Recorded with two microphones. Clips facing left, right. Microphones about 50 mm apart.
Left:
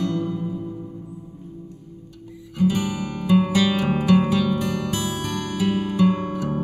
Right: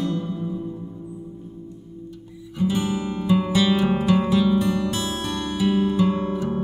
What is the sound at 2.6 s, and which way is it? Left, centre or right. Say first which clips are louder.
Music: left 1 dB; right.